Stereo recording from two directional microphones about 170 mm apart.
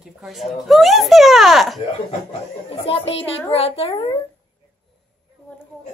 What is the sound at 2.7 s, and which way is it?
A child's voice, 35° left (ahead or behind).